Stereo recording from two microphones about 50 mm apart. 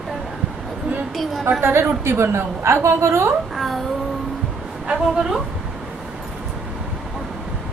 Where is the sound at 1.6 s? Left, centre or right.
Right.